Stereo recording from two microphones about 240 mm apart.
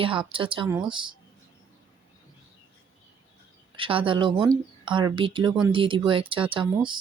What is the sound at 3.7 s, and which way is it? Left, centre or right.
Speech, right.